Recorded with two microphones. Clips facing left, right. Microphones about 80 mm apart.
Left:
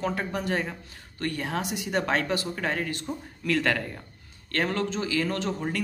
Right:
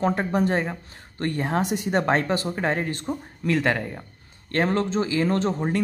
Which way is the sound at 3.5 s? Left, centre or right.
Right.